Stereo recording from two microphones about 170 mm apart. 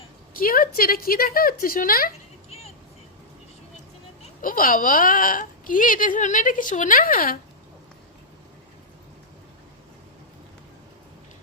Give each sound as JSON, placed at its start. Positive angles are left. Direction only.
{"t": 0.3, "sound": "speech", "side_deg": 55}
{"t": 2.5, "sound": "vehicle", "side_deg": 40}
{"t": 4.2, "sound": "speech", "side_deg": 50}